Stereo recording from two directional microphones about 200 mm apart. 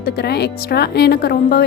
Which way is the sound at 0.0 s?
55° left (ahead or behind).